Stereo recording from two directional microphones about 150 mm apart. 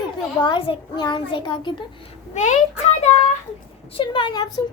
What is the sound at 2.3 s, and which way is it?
Speech, 55° left (ahead or behind).